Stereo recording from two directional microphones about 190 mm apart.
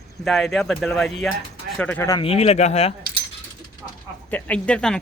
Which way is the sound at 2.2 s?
30° left (ahead or behind).